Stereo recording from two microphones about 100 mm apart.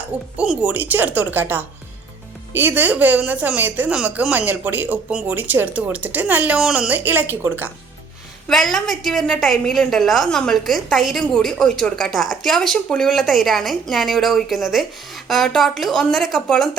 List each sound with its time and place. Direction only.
0.3 s speech: 15° right (ahead or behind)
8.4 s a woman's voice: centre (ahead or behind)